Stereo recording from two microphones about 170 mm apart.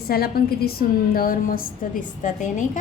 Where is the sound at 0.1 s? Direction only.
65° left (ahead or behind).